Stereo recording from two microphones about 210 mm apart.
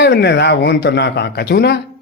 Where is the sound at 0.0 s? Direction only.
55° left (ahead or behind).